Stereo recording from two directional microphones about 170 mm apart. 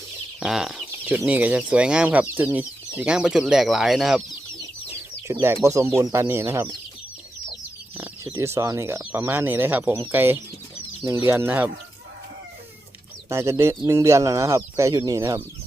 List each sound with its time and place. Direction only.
0.3 s chicken: 5° right (ahead or behind)
0.9 s speech: 10° right (ahead or behind)
4.9 s chicken: 15° right (ahead or behind)
6.0 s speech: 15° right (ahead or behind)
7.9 s speech: 10° right (ahead or behind)
13.2 s speech: 15° right (ahead or behind)